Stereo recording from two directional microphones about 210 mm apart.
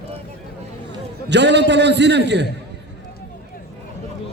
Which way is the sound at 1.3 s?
55° right (ahead or behind).